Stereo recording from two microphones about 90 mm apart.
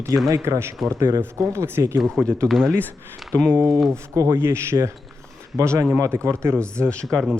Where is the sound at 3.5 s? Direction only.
30° right (ahead or behind).